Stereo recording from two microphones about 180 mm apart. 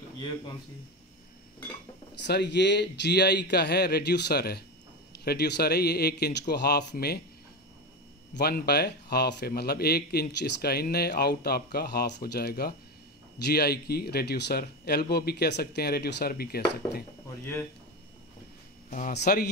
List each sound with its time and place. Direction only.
2.1 s a man's voice: 70° left (ahead or behind)
8.4 s speech: 60° left (ahead or behind)
18.9 s speech: 45° left (ahead or behind)
19.1 s speech: 60° left (ahead or behind)